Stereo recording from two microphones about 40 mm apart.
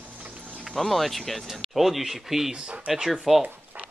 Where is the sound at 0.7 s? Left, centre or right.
Centre.